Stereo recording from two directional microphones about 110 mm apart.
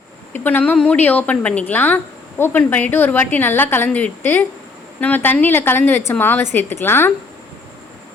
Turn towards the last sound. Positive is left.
turn(degrees=20)  # may be behind; listen again after turning